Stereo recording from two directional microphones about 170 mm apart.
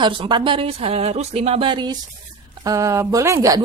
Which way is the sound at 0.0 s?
25° right (ahead or behind).